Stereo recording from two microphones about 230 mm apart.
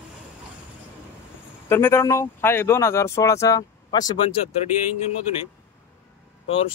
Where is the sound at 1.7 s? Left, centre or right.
Centre.